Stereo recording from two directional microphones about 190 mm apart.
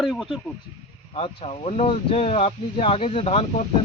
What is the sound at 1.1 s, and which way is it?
Speech, 30° left (ahead or behind).